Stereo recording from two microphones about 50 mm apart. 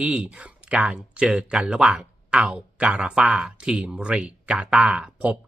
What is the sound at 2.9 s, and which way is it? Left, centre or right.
Speech, centre.